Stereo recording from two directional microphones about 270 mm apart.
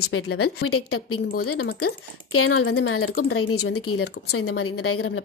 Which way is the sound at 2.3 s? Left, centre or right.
Left.